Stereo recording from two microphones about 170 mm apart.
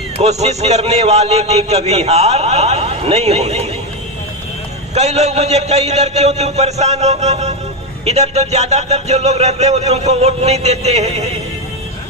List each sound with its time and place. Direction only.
0.2 s a man's voice: 40° right (ahead or behind)
4.9 s a man's voice: 40° right (ahead or behind)